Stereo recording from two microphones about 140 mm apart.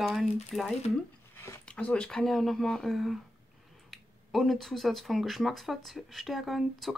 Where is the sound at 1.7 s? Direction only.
10° left (ahead or behind).